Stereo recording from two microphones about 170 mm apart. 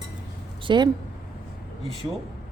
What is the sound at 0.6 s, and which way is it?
Speech, 25° right (ahead or behind).